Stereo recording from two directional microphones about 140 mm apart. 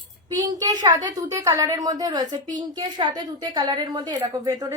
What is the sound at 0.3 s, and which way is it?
A woman's voice, 25° right (ahead or behind).